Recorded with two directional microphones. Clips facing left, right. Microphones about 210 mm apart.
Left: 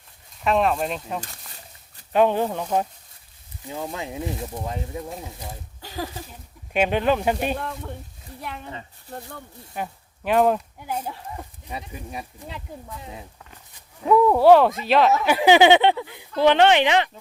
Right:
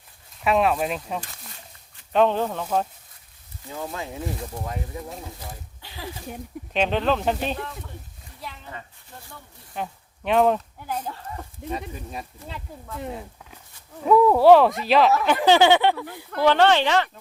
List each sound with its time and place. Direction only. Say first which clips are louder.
0.4 s speech: even; 5° right (ahead or behind)
2.1 s speech: left 1 dB; 10° left (ahead or behind)
3.9 s speech: left 2 dB; 20° left (ahead or behind)
5.8 s a sound: left 9 dB; 45° left (ahead or behind)
6.7 s speech: left 2 dB; 10° left (ahead or behind)
8.4 s speech: left 4 dB; 60° left (ahead or behind)
9.7 s speech: even; 5° left (ahead or behind)
14.1 s speech: even; centre (ahead or behind); by 17.1 s 15° left (ahead or behind)